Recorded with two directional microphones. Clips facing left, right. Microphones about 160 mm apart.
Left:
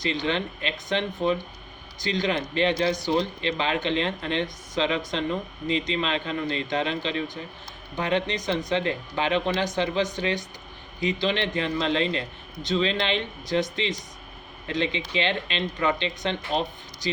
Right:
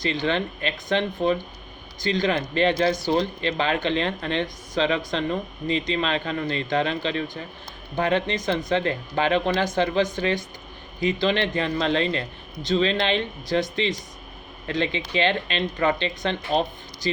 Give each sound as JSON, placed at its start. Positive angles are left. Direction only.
{"t": 0.0, "sound": "a man's voice", "side_deg": -40}
{"t": 14.7, "sound": "speech", "side_deg": -45}